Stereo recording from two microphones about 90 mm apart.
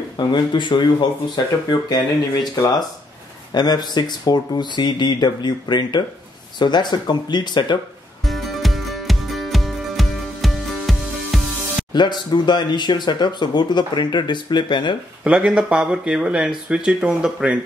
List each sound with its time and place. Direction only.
0.3 s speech: 60° left (ahead or behind)
1.3 s speech: 50° left (ahead or behind)
8.2 s music: centre (ahead or behind)
11.9 s speech: 55° left (ahead or behind)
15.2 s speech: 10° right (ahead or behind)